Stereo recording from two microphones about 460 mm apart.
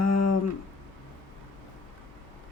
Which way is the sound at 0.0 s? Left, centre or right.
Left.